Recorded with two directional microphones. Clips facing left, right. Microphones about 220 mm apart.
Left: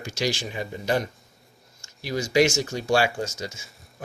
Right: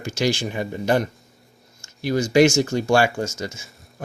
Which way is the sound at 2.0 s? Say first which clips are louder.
Right 5 dB; 50° right (ahead or behind).